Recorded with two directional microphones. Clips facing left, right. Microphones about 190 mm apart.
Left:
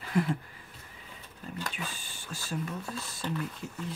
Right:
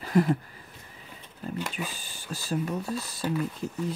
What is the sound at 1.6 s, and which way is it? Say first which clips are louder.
Speech: right 2 dB; 15° right (ahead or behind).